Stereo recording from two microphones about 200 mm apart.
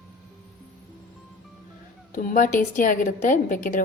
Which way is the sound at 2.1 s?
40° left (ahead or behind).